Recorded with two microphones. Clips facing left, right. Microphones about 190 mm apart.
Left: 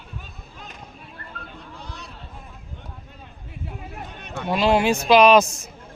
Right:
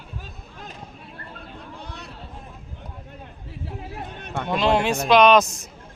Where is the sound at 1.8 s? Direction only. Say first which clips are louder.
Right 1 dB; 55° right (ahead or behind).